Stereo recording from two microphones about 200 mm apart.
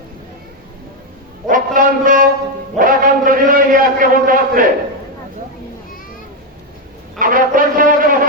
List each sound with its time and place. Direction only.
1.5 s speech: 45° right (ahead or behind)
2.7 s a sound: 45° right (ahead or behind)
7.2 s brass instrument: 45° right (ahead or behind)